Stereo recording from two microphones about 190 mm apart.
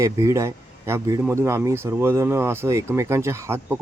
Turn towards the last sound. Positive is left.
turn(degrees=-15)  # may be behind; listen again after turning